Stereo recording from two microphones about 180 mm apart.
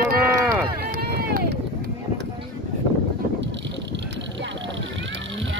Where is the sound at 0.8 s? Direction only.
60° right (ahead or behind).